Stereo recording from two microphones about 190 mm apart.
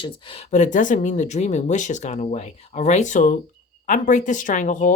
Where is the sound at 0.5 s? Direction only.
40° left (ahead or behind).